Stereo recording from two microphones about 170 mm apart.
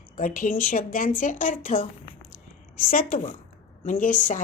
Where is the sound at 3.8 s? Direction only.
50° left (ahead or behind).